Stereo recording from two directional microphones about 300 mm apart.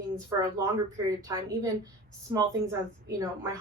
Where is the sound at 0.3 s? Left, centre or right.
Centre.